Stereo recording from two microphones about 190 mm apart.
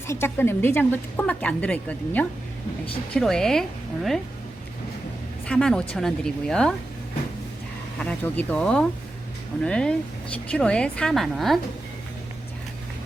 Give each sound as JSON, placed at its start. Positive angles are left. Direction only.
{"t": 0.1, "sound": "a woman's voice", "side_deg": 10}
{"t": 5.5, "sound": "speech", "side_deg": 5}
{"t": 7.9, "sound": "speech", "side_deg": 5}